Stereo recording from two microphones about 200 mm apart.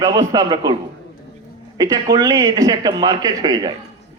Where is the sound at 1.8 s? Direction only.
20° right (ahead or behind).